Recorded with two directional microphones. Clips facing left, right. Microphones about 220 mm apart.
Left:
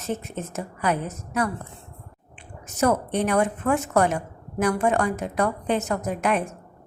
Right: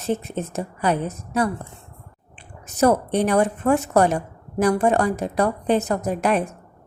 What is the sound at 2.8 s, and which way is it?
A woman's voice, 35° right (ahead or behind).